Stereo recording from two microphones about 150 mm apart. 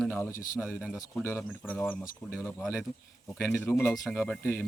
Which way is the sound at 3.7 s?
15° left (ahead or behind).